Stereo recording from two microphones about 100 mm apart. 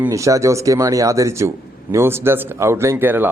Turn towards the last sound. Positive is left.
turn(degrees=-20)  # may be behind; listen again after turning